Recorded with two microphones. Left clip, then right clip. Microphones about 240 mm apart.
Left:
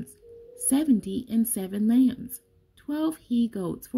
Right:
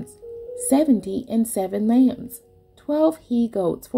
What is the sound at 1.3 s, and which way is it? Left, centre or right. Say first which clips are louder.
Speech: right 7 dB; left.